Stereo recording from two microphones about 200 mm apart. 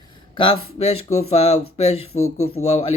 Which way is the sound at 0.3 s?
25° left (ahead or behind).